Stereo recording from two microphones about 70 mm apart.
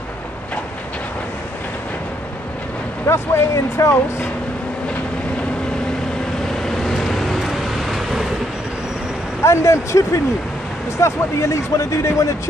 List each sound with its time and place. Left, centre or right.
3.1 s speech: left
6.6 s vehicle: centre
9.4 s speech: left